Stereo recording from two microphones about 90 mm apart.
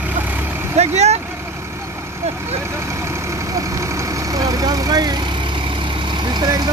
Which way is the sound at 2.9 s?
30° right (ahead or behind).